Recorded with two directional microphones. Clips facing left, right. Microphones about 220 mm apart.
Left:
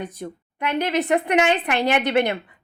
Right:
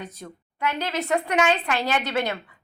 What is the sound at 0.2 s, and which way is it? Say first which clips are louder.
A woman's voice: left 2 dB; 15° left (ahead or behind).